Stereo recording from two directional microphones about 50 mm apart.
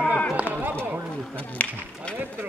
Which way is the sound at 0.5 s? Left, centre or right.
Right.